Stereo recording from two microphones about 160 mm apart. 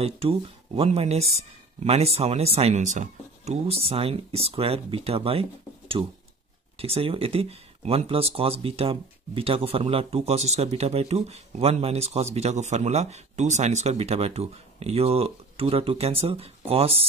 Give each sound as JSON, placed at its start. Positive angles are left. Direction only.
{"t": 0.0, "sound": "speech", "side_deg": -35}